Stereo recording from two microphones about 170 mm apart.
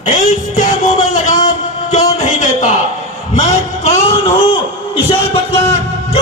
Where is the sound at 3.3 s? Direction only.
45° left (ahead or behind).